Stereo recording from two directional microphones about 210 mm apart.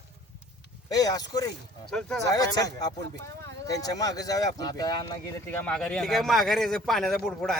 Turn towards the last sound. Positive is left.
turn(degrees=0)  # may be behind; listen again after turning